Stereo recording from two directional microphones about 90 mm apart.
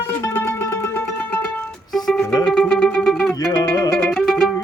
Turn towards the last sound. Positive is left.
turn(degrees=5)  # may be behind; listen again after turning